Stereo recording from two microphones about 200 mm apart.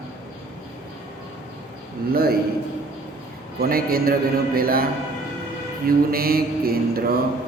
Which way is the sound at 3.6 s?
50° right (ahead or behind).